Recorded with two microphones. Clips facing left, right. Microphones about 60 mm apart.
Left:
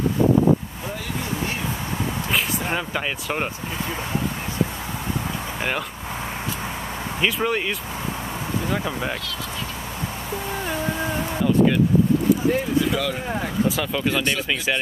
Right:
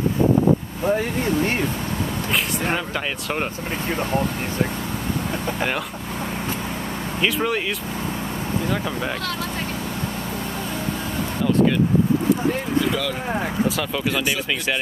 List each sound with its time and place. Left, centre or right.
0.8 s speech: right
7.2 s speech: centre
8.6 s speech: centre
13.7 s speech: centre